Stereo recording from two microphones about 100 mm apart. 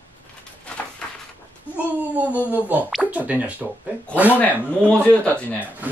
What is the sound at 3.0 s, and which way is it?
Speech, 15° right (ahead or behind).